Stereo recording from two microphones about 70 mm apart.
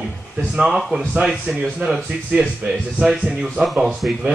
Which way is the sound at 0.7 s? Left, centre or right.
Centre.